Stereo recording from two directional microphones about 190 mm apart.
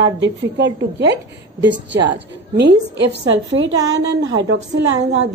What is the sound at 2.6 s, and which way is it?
A woman's voice, 60° right (ahead or behind).